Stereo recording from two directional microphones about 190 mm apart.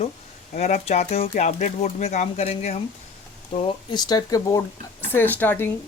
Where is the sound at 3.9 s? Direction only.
20° left (ahead or behind).